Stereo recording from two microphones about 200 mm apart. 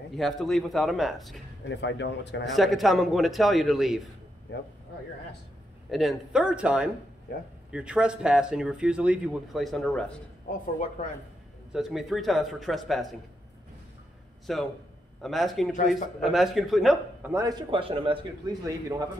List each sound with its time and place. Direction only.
0.1 s speech: centre (ahead or behind)
1.7 s speech: 60° left (ahead or behind)
2.4 s speech: centre (ahead or behind)
4.5 s speech: 60° left (ahead or behind)
5.9 s speech: centre (ahead or behind)
11.0 s a man's voice: 35° left (ahead or behind)
11.7 s speech: centre (ahead or behind)
14.4 s speech: centre (ahead or behind)
17.3 s a man's voice: 15° right (ahead or behind)